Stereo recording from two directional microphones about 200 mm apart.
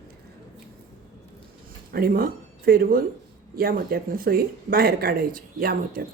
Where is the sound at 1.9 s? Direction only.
50° right (ahead or behind).